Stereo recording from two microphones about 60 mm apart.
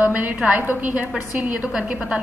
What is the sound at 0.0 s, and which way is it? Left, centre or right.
A woman's voice, right.